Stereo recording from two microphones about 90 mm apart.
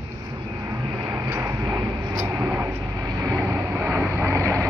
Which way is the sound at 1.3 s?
35° right (ahead or behind).